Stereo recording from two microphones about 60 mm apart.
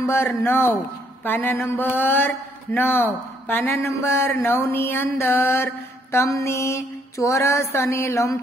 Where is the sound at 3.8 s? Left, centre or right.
Left.